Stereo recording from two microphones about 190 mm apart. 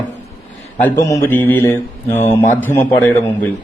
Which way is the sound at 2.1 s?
40° left (ahead or behind).